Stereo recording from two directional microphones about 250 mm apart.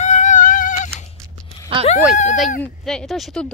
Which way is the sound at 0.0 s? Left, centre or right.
Left.